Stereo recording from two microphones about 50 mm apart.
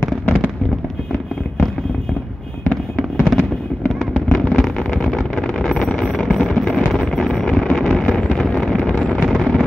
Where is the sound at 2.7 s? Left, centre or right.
Centre.